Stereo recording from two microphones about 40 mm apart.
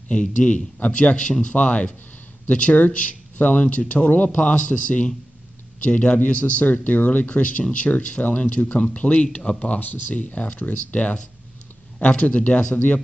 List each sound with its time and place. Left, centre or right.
0.1 s speech: left